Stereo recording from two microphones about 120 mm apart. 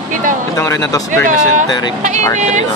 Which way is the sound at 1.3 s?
90° right.